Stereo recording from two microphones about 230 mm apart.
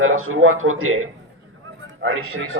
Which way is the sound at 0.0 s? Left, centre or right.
Right.